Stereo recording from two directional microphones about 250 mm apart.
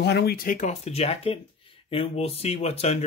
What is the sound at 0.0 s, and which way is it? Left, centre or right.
Speech, left.